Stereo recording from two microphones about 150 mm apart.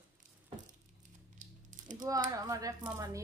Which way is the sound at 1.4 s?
60° right (ahead or behind).